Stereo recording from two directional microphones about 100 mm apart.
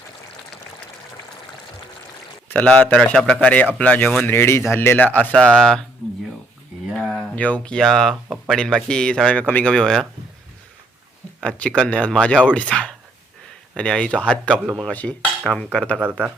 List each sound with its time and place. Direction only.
2.5 s speech: 15° left (ahead or behind)
7.3 s speech: 15° left (ahead or behind)
11.3 s speech: 10° left (ahead or behind)